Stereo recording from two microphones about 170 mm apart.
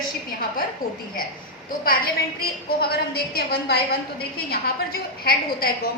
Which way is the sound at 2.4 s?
65° left (ahead or behind).